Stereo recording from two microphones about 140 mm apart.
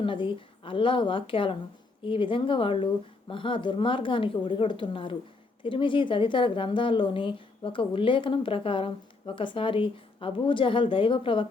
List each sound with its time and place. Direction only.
0.0 s a woman's voice: 35° left (ahead or behind)